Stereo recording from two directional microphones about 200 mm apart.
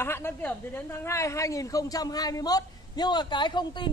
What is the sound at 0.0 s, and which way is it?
A woman's voice, 10° left (ahead or behind).